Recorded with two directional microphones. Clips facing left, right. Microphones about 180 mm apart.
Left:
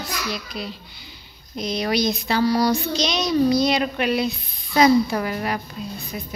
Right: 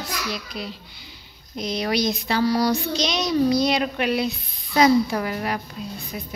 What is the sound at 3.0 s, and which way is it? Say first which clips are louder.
A child's voice: left 1 dB; 10° right (ahead or behind).